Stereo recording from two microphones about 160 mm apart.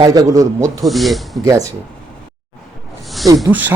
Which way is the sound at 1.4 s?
20° right (ahead or behind).